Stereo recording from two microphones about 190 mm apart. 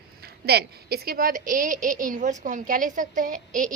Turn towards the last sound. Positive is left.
turn(degrees=-45)  # may be behind; listen again after turning